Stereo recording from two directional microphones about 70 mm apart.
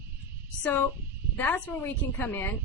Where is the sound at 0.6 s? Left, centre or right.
Left.